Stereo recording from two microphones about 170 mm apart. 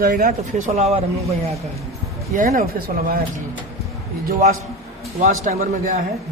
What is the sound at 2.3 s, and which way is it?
Speech, 45° right (ahead or behind).